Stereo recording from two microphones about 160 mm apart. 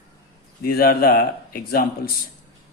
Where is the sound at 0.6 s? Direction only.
70° left (ahead or behind).